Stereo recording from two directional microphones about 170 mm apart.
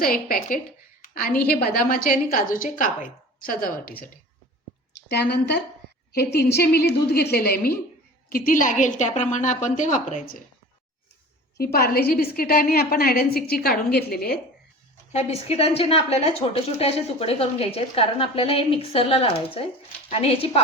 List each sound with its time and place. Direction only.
0.0 s a woman's voice: 60° left (ahead or behind)
1.0 s a sound: 55° left (ahead or behind)
1.6 s a woman's voice: 60° left (ahead or behind)
5.0 s speech: 80° left
6.1 s a woman's voice: 70° left (ahead or behind)
8.3 s a woman's voice: 55° left (ahead or behind)
11.5 s a woman's voice: 65° left (ahead or behind)
15.1 s a woman's voice: 40° left (ahead or behind)